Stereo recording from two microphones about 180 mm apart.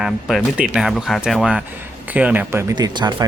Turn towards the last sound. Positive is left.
turn(degrees=-25)  # may be behind; listen again after turning